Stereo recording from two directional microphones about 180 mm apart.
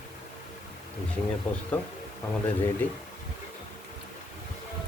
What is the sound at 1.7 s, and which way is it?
Speech, 10° left (ahead or behind).